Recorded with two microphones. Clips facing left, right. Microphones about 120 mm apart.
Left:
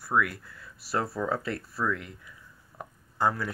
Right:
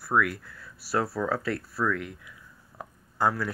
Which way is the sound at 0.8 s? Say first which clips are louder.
Right 2 dB; 5° right (ahead or behind).